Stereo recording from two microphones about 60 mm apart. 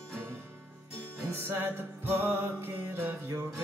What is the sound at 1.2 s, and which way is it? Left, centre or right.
Music, right.